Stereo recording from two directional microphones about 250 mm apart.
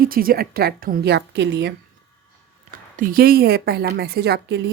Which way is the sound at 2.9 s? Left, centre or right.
Right.